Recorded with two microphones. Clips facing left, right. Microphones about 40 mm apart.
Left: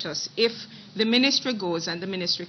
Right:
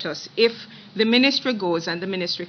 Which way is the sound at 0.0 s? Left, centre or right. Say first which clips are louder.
Right 5 dB; right.